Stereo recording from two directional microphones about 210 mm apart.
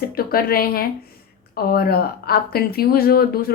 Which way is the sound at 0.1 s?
45° left (ahead or behind).